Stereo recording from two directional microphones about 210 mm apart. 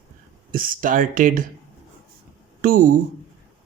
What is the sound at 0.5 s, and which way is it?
Speech, 40° right (ahead or behind).